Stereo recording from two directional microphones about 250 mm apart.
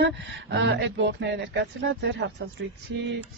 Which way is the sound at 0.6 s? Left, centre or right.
Right.